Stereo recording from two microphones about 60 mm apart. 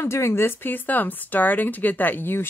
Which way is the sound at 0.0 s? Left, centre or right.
Left.